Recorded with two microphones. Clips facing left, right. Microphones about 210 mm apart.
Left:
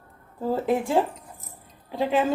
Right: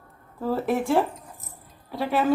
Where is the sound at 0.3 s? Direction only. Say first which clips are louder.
Left 1 dB; 15° left (ahead or behind).